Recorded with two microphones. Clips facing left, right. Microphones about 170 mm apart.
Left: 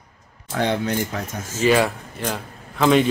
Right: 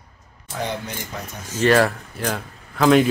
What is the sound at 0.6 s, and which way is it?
Speech, 70° left (ahead or behind).